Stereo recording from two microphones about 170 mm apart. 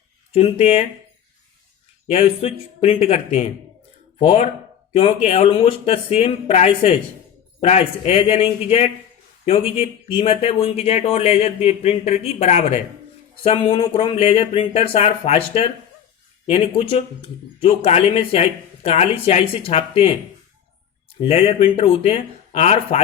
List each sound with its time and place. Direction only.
0.3 s speech: 40° left (ahead or behind)
2.0 s speech: 35° left (ahead or behind)
21.2 s speech: 35° left (ahead or behind)